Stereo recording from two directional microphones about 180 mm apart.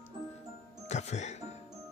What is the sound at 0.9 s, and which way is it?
Music, 40° left (ahead or behind).